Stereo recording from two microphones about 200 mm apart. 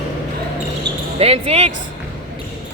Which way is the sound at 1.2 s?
30° right (ahead or behind).